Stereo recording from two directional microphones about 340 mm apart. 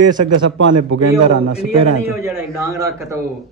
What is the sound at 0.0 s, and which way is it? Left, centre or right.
A man's voice, right.